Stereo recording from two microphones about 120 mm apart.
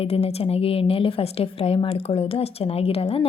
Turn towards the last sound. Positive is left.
turn(degrees=55)  # may be behind; listen again after turning